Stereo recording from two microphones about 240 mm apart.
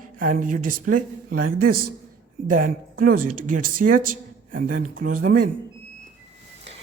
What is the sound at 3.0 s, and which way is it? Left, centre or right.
A woman's voice, right.